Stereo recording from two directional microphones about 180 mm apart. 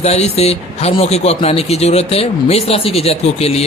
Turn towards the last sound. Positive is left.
turn(degrees=35)  # may be behind; listen again after turning